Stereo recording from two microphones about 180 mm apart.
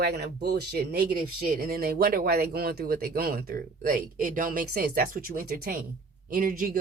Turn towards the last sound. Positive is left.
turn(degrees=-50)  # may be behind; listen again after turning